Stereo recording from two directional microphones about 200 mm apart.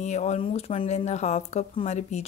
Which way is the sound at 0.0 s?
35° left (ahead or behind).